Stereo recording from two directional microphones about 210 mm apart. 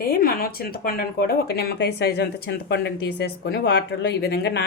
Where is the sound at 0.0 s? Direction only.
45° left (ahead or behind).